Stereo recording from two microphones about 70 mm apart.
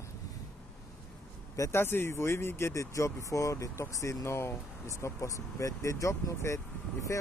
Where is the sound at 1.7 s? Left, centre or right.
Left.